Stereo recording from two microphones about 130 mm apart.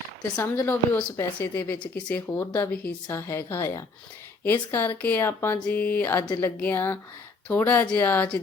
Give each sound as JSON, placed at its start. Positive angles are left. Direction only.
{"t": 0.3, "sound": "a woman's voice", "side_deg": 20}